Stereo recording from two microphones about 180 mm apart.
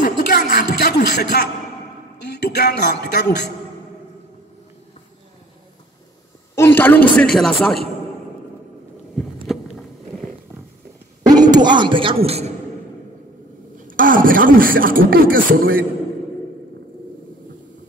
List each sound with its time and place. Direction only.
0.0 s music: 50° left (ahead or behind); by 3.3 s 65° left (ahead or behind)
6.5 s a woman's voice: 15° left (ahead or behind)
9.5 s walk: centre (ahead or behind)
11.2 s a man's voice: 20° right (ahead or behind)
13.8 s speech: 50° right (ahead or behind)